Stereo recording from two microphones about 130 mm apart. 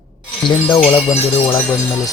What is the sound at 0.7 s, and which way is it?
Speech, 5° left (ahead or behind).